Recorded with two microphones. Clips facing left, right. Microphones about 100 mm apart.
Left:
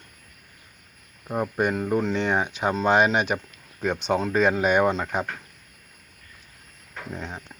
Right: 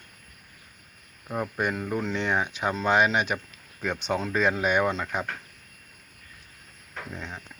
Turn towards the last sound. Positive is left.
turn(degrees=20)  # may be behind; listen again after turning